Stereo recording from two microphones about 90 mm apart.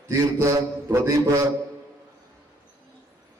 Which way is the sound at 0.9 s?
30° right (ahead or behind).